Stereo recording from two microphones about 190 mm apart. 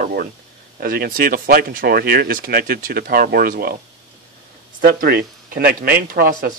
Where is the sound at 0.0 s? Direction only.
55° right (ahead or behind).